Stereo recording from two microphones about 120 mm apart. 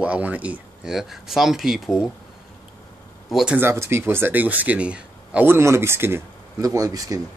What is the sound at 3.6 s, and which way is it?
Speech, 20° right (ahead or behind).